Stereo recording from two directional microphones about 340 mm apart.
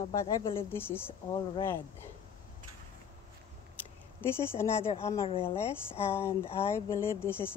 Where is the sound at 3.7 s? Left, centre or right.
Centre.